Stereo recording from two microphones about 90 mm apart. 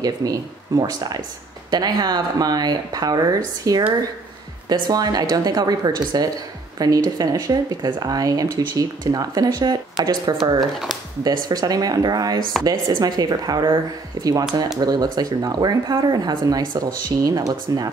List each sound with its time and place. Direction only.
0.0 s speech: 45° right (ahead or behind)
4.8 s speech: 50° right (ahead or behind)
14.8 s speech: 45° right (ahead or behind)